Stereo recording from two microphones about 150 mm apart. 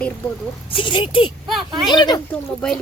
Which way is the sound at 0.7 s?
35° left (ahead or behind).